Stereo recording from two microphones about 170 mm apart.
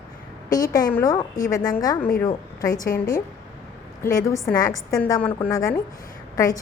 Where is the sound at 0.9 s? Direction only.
20° left (ahead or behind).